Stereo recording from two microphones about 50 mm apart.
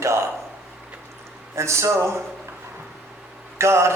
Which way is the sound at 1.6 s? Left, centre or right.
Right.